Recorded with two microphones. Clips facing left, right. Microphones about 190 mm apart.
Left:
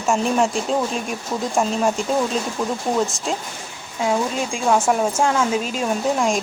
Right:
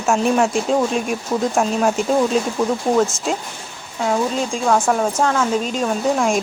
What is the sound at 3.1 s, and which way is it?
Speech, centre (ahead or behind).